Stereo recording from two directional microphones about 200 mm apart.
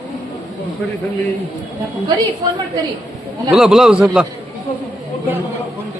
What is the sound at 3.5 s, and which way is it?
Speech, centre (ahead or behind).